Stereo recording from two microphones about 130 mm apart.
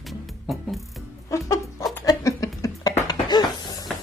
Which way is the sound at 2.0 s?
25° left (ahead or behind).